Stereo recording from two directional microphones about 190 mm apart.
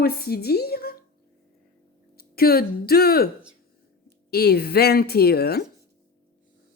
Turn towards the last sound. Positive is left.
turn(degrees=55)  # may be behind; listen again after turning